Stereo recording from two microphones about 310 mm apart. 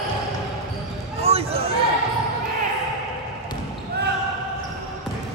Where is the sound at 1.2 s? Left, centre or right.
Centre.